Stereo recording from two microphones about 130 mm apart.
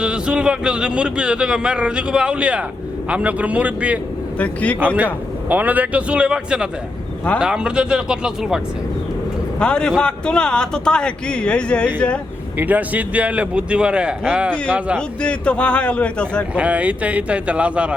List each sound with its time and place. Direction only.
0.0 s a man's voice: 10° right (ahead or behind)
4.4 s a man's voice: 10° left (ahead or behind)
4.9 s a man's voice: 15° right (ahead or behind)
9.6 s a man's voice: 5° left (ahead or behind)
12.5 s a man's voice: 10° right (ahead or behind)
14.9 s a man's voice: 10° left (ahead or behind)
16.6 s a man's voice: 10° right (ahead or behind)